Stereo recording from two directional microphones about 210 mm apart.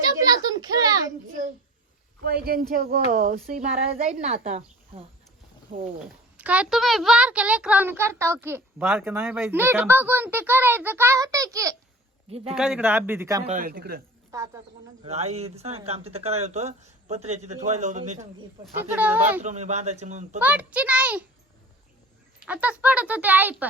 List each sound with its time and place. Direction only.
0.0 s a sound: 20° right (ahead or behind)
2.2 s speech: 45° right (ahead or behind)
6.1 s a child's voice: 5° right (ahead or behind)
12.5 s a child's voice: 5° right (ahead or behind)
13.4 s speech: 35° right (ahead or behind)
13.7 s speech: 45° right (ahead or behind)
14.3 s speech: 15° right (ahead or behind)
15.0 s speech: 30° right (ahead or behind)
18.8 s a child's voice: 10° right (ahead or behind)
19.4 s speech: 35° right (ahead or behind)
20.4 s a child's voice: 5° right (ahead or behind)
22.4 s a child's voice: 5° right (ahead or behind)